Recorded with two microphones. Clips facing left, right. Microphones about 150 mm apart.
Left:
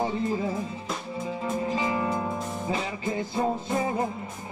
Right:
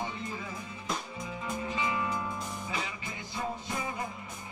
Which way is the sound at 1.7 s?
35° left (ahead or behind).